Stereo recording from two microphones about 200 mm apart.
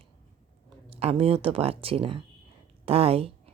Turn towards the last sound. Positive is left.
turn(degrees=-30)  # may be behind; listen again after turning